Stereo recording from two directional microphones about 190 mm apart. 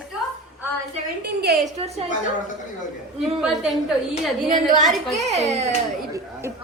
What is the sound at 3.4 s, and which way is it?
A woman's voice, centre (ahead or behind).